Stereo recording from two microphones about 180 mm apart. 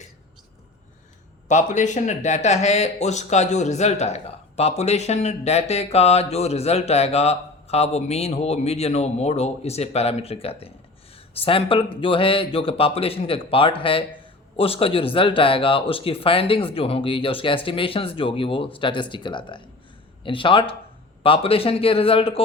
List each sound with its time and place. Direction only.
1.5 s speech: 40° left (ahead or behind)